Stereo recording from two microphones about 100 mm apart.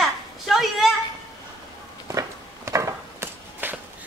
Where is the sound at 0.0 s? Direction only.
Centre (ahead or behind).